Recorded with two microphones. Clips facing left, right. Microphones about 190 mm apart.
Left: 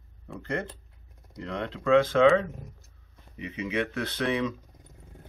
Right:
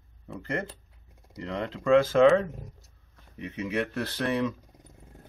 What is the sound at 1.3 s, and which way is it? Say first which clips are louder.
Speech: right 1 dB; 5° right (ahead or behind).